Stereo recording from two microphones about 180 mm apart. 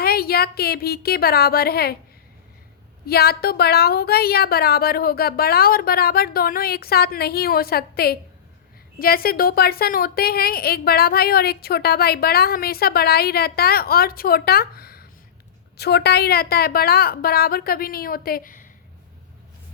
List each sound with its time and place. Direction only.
0.0 s a woman's voice: 60° left (ahead or behind)
3.1 s a woman's voice: 60° left (ahead or behind)